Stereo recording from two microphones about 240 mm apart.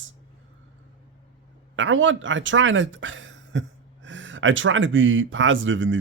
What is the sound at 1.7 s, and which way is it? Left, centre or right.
Speech, right.